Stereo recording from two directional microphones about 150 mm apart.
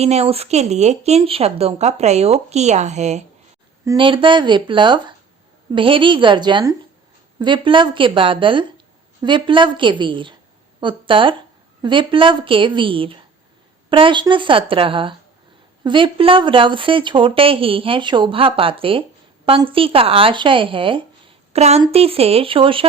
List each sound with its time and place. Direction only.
0.0 s speech: 45° right (ahead or behind)
3.9 s speech: 35° right (ahead or behind)